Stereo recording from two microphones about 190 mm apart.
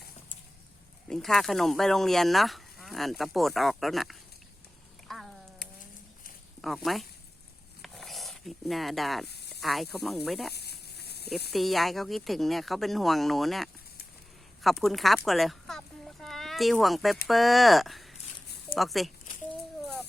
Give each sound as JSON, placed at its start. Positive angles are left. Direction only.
{"t": 1.0, "sound": "speech", "side_deg": 5}
{"t": 5.0, "sound": "a sound", "side_deg": 0}
{"t": 6.6, "sound": "speech", "side_deg": 0}
{"t": 7.8, "sound": "a sound", "side_deg": 0}
{"t": 9.6, "sound": "speech", "side_deg": 0}
{"t": 10.5, "sound": "snake", "side_deg": 60}
{"t": 11.5, "sound": "speech", "side_deg": 0}
{"t": 14.6, "sound": "a sound", "side_deg": 0}
{"t": 17.2, "sound": "speech", "side_deg": 0}